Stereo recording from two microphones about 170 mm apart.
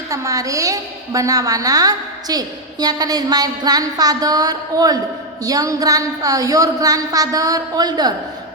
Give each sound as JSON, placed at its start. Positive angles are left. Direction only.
{"t": 0.1, "sound": "a woman's voice", "side_deg": -20}